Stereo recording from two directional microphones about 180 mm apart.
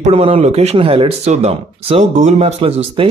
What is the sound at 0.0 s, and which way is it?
Speech, 30° right (ahead or behind).